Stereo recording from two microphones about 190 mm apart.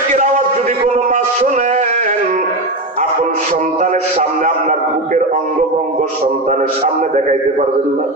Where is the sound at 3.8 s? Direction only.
40° right (ahead or behind).